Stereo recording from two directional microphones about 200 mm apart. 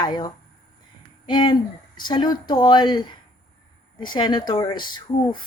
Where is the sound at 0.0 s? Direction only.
20° left (ahead or behind).